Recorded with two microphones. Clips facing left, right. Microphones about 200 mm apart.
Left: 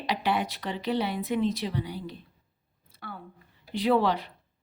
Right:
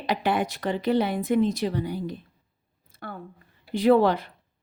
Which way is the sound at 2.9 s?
50° right (ahead or behind).